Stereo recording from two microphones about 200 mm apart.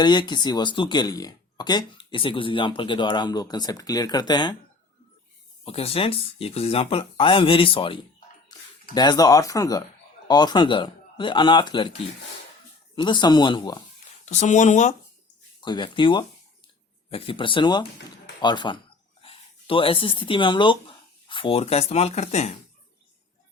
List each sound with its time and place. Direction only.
0.0 s speech: 20° left (ahead or behind)
5.6 s speech: 30° left (ahead or behind)
8.5 s a sound: 20° left (ahead or behind)
9.0 s speech: 20° left (ahead or behind)
13.0 s speech: 20° left (ahead or behind)
14.3 s speech: 35° left (ahead or behind)
15.6 s speech: 25° left (ahead or behind)